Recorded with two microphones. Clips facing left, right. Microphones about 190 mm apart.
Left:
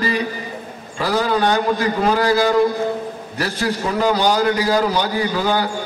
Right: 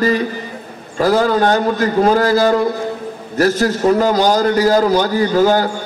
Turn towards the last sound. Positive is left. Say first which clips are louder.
# right 6 dB
turn(degrees=-45)  # may be behind; listen again after turning